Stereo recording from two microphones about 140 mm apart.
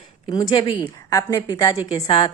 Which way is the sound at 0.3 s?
30° left (ahead or behind).